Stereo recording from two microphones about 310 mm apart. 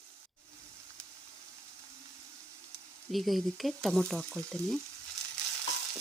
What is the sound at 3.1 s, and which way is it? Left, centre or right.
Speech, centre.